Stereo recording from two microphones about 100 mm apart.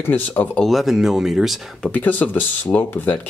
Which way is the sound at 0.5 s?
Centre (ahead or behind).